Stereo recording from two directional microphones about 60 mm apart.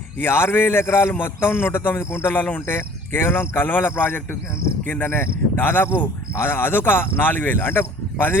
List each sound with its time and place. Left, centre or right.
0.2 s a man's voice: left
2.7 s speech: left